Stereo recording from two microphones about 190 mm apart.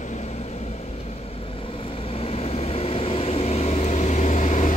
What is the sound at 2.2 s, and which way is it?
Vehicle, 30° left (ahead or behind).